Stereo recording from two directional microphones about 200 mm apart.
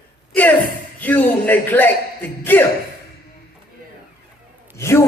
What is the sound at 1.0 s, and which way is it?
A man's voice, 10° left (ahead or behind).